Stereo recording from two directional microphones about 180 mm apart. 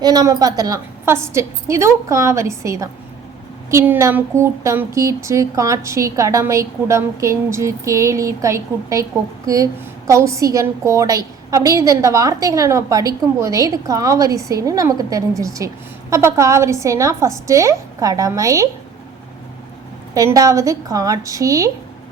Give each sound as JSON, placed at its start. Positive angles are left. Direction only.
{"t": 0.0, "sound": "a woman's voice", "side_deg": -20}
{"t": 20.1, "sound": "a woman's voice", "side_deg": -20}